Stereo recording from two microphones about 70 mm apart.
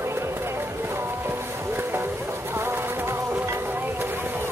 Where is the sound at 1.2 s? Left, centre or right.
Right.